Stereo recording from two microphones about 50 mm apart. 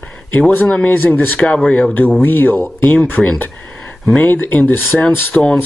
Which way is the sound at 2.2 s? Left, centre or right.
Left.